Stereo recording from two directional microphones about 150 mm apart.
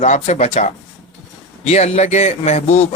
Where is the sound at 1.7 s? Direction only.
45° left (ahead or behind).